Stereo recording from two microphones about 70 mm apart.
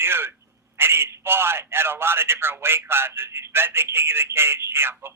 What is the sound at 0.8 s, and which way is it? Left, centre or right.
A man's voice, right.